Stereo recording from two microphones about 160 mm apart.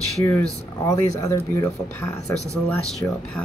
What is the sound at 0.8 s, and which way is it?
Speech, 20° left (ahead or behind).